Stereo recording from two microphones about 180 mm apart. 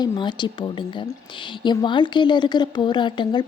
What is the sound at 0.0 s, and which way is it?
A woman's voice, 25° left (ahead or behind).